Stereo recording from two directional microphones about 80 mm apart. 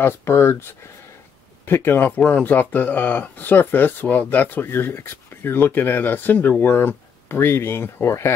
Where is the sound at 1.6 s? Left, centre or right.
Left.